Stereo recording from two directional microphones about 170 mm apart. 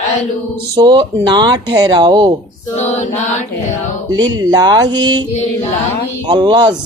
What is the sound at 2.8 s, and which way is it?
Female singing, 40° left (ahead or behind).